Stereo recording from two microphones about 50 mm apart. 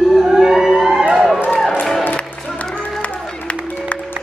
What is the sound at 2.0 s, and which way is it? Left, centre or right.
Music, left.